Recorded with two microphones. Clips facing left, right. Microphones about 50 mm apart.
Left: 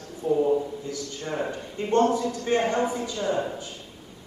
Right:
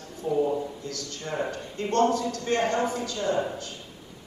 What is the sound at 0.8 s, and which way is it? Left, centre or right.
A man's voice, centre.